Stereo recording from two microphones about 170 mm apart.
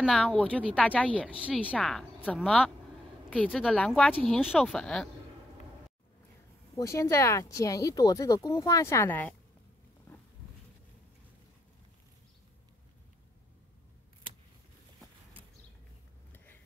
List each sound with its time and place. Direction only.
0.0 s a woman's voice: centre (ahead or behind)
6.7 s speech: 20° left (ahead or behind)